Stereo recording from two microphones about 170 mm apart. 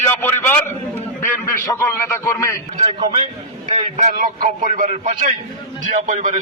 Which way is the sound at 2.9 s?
35° right (ahead or behind).